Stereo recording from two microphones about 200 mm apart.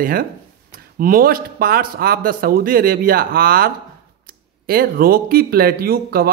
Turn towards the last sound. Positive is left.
turn(degrees=-50)  # may be behind; listen again after turning